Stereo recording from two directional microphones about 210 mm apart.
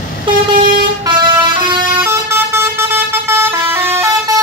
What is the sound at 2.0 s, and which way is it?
Vehicle, 10° right (ahead or behind).